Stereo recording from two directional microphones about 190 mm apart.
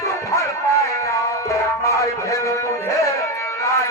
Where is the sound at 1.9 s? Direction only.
15° left (ahead or behind).